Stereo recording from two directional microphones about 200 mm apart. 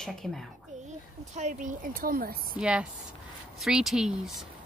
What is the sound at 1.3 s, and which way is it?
A woman's voice, 40° right (ahead or behind).